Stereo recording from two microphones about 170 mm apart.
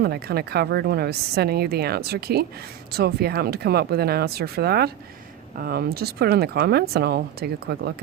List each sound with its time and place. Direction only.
0.0 s a woman's voice: 70° right (ahead or behind)